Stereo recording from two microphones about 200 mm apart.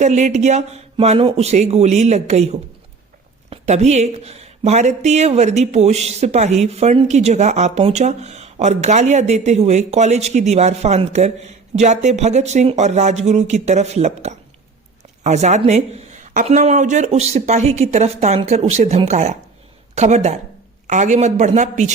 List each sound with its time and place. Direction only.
0.0 s speech: 35° right (ahead or behind)